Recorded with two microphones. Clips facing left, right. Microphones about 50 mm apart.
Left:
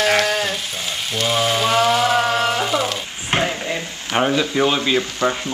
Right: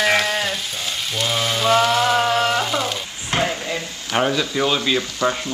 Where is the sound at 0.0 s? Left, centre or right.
Centre.